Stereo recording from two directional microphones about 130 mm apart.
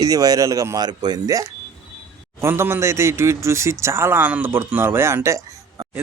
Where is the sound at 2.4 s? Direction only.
20° right (ahead or behind).